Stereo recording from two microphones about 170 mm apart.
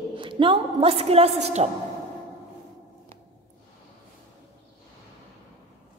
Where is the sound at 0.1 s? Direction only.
30° right (ahead or behind).